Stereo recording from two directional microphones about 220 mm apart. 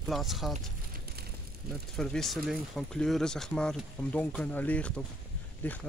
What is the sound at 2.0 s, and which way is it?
Speech, centre (ahead or behind).